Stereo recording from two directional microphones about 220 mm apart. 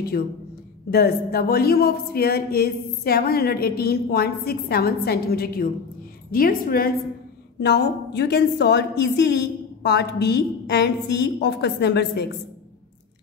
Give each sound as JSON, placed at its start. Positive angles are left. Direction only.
{"t": 0.8, "sound": "a woman's voice", "side_deg": 45}